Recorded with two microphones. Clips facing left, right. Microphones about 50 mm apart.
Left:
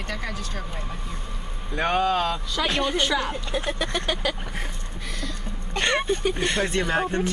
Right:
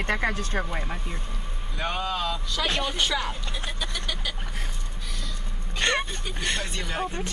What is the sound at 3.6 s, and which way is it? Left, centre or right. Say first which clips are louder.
Vehicle: left 5 dB; left.